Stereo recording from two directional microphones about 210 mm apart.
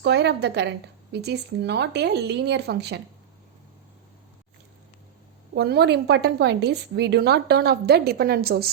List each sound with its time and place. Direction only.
0.0 s a woman's voice: 55° right (ahead or behind)
5.5 s a woman's voice: 50° right (ahead or behind)